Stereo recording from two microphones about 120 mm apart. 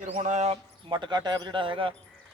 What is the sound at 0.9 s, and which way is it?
Speech, 40° right (ahead or behind).